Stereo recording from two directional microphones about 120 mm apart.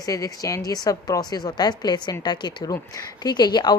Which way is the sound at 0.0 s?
30° left (ahead or behind).